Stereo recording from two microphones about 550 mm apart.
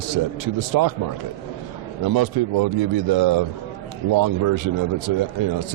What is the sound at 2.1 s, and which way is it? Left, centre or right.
Speech, right.